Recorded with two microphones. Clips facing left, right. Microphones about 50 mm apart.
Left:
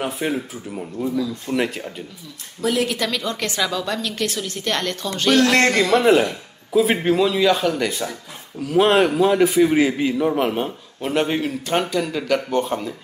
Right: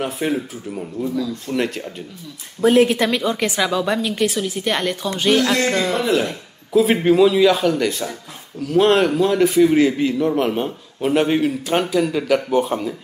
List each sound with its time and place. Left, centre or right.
0.0 s a man's voice: centre
2.6 s a woman's voice: right; by 5.4 s centre
5.8 s speech: left
6.2 s a man's voice: centre